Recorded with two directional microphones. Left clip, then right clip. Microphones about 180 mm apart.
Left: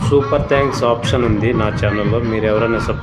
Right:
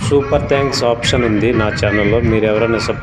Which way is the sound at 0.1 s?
20° right (ahead or behind).